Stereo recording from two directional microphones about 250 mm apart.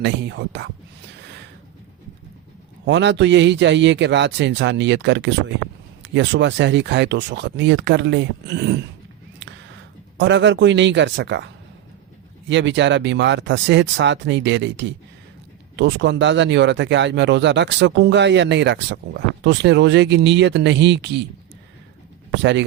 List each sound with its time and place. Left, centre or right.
0.0 s speech: right
2.8 s speech: right
10.2 s speech: right
22.4 s speech: right